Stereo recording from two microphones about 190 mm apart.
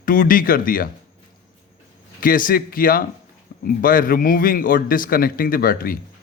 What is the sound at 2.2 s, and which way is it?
Speech, 45° left (ahead or behind).